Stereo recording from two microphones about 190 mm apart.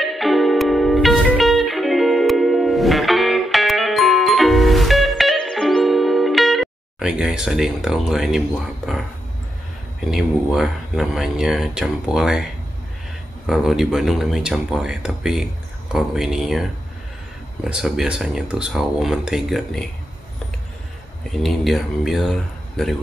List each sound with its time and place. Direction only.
0.0 s music: centre (ahead or behind)
10.1 s speech: centre (ahead or behind)
13.5 s speech: centre (ahead or behind)
17.6 s speech: centre (ahead or behind)
21.4 s speech: centre (ahead or behind)